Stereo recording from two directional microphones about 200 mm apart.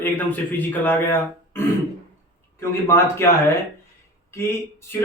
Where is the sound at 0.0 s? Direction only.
10° left (ahead or behind).